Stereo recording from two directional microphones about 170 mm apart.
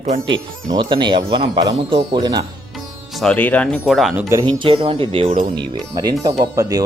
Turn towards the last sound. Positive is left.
turn(degrees=-20)  # may be behind; listen again after turning